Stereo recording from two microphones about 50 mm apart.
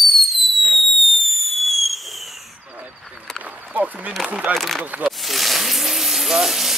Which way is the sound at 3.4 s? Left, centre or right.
Right.